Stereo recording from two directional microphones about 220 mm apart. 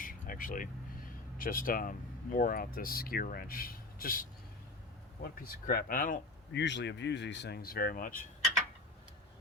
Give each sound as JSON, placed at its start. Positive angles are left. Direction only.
{"t": 0.0, "sound": "vehicle", "side_deg": 40}
{"t": 1.4, "sound": "speech", "side_deg": 40}